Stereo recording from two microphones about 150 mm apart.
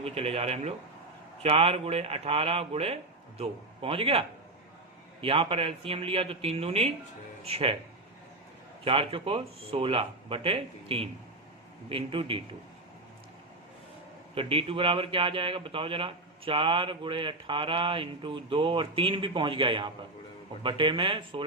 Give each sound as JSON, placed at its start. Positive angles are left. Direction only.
{"t": 0.0, "sound": "a man's voice", "side_deg": -40}
{"t": 8.8, "sound": "a man's voice", "side_deg": -35}
{"t": 14.3, "sound": "a man's voice", "side_deg": -40}